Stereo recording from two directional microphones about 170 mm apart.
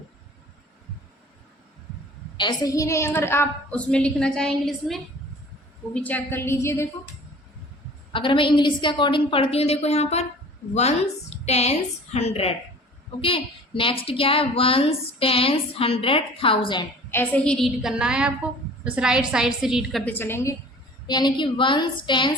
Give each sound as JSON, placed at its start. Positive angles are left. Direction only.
{"t": 2.4, "sound": "a woman's voice", "side_deg": 20}
{"t": 8.1, "sound": "a woman's voice", "side_deg": 30}
{"t": 11.4, "sound": "a woman's voice", "side_deg": 40}
{"t": 17.1, "sound": "a woman's voice", "side_deg": 10}
{"t": 20.1, "sound": "a woman's voice", "side_deg": 15}